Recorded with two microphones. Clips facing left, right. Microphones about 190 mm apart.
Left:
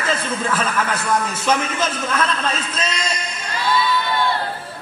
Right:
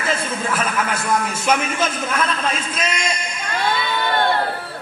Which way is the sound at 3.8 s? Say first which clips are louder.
Even; 60° right (ahead or behind).